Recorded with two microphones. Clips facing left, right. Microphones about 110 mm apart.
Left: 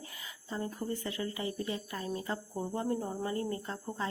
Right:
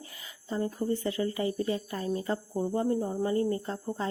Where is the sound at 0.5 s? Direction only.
30° right (ahead or behind).